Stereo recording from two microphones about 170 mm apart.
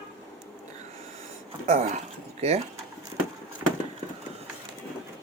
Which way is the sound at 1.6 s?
45° right (ahead or behind).